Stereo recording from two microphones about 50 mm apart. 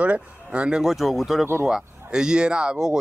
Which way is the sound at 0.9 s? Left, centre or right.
Centre.